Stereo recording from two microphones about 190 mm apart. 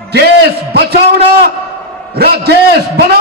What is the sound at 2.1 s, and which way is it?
A man's voice, 55° right (ahead or behind).